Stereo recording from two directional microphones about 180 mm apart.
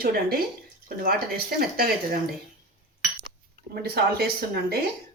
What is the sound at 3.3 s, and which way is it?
Speech, 55° right (ahead or behind).